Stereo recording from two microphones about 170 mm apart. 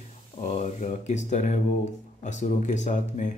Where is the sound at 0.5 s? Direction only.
45° left (ahead or behind).